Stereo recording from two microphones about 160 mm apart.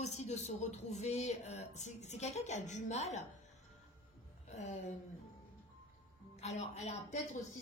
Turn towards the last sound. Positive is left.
turn(degrees=45)  # may be behind; listen again after turning